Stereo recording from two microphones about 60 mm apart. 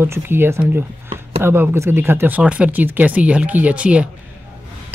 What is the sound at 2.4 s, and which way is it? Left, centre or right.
Speech, right.